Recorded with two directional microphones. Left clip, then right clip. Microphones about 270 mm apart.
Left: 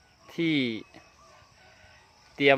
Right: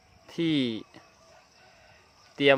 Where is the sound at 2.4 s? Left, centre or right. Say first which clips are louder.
Even; centre.